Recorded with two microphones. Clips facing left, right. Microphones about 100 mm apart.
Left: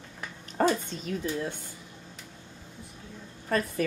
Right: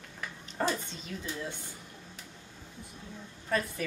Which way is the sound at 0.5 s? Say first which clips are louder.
Left 6 dB; 50° left (ahead or behind).